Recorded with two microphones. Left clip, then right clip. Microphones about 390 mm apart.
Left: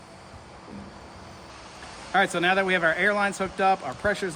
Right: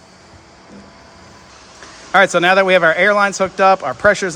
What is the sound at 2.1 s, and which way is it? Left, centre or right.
Speech, centre.